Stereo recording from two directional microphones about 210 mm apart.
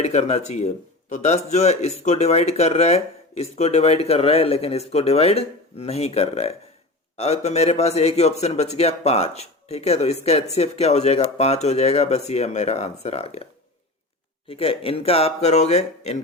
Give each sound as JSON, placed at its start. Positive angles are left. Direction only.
{"t": 0.0, "sound": "a man's voice", "side_deg": 30}